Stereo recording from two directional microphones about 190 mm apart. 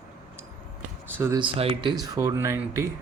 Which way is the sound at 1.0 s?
10° right (ahead or behind).